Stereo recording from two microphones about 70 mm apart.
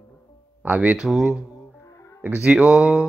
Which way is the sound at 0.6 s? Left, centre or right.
Right.